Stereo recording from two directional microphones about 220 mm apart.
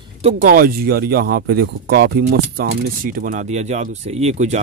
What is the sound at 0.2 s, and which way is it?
Speech, 30° right (ahead or behind).